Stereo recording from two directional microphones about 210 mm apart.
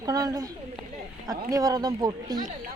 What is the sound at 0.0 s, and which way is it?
Speech, 15° right (ahead or behind).